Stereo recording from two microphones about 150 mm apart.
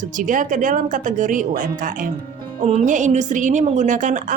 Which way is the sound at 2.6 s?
45° right (ahead or behind).